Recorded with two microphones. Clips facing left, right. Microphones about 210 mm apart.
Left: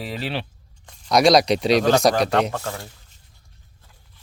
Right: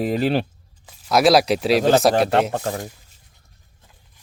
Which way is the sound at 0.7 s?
5° right (ahead or behind).